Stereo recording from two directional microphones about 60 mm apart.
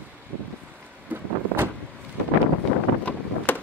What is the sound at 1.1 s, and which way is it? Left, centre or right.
Vehicle, right.